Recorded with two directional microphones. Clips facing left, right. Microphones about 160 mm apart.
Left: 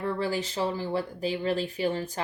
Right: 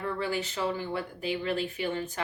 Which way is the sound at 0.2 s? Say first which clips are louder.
Left 2 dB; 35° left (ahead or behind).